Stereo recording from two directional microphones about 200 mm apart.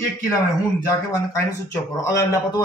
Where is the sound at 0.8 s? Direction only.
15° left (ahead or behind).